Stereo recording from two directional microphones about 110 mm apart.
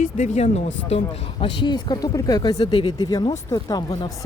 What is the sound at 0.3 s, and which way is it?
Speech, 85° left.